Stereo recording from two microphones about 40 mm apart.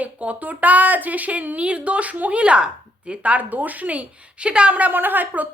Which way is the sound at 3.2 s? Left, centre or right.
Right.